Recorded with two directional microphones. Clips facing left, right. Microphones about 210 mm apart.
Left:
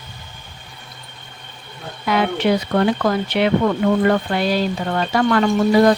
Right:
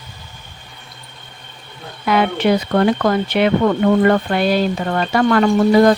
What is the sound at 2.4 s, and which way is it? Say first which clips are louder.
Speech: right 2 dB; 60° right (ahead or behind).